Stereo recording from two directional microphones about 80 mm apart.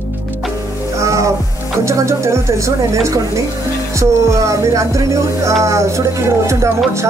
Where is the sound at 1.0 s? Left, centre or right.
Right.